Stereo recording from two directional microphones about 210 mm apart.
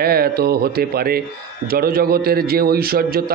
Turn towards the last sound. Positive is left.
turn(degrees=-45)  # may be behind; listen again after turning